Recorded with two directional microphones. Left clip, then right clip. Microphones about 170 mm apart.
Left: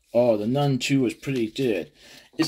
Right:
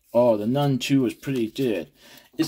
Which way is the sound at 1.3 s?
75° right (ahead or behind).